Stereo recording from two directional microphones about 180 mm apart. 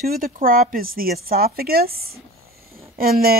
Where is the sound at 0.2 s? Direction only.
50° right (ahead or behind).